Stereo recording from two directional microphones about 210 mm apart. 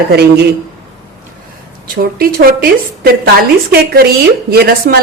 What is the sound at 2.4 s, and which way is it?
Speech, 45° right (ahead or behind).